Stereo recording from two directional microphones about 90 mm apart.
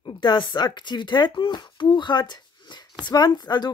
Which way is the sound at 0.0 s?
60° left (ahead or behind).